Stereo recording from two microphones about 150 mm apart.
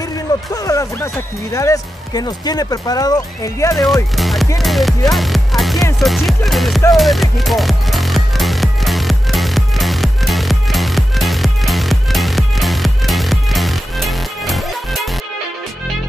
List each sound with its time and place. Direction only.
0.3 s music: 25° left (ahead or behind)
0.7 s speech: 20° left (ahead or behind)
3.7 s speech: centre (ahead or behind)
5.1 s music: centre (ahead or behind)
5.9 s speech: centre (ahead or behind)
6.9 s music: centre (ahead or behind)